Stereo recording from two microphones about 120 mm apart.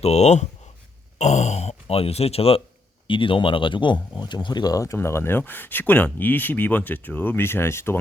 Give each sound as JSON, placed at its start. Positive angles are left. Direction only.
{"t": 0.0, "sound": "speech", "side_deg": 65}